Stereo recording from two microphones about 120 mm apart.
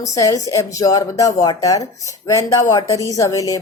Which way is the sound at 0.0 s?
30° left (ahead or behind).